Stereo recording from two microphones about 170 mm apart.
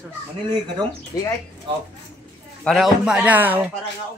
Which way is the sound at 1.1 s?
20° left (ahead or behind).